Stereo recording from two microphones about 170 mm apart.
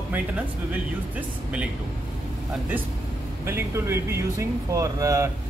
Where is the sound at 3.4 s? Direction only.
15° right (ahead or behind).